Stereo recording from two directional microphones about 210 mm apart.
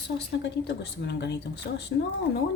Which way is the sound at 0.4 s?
55° left (ahead or behind).